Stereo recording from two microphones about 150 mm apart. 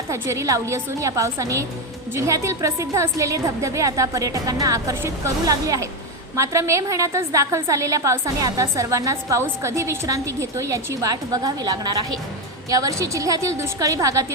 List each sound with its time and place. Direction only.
0.1 s a woman's voice: 20° right (ahead or behind)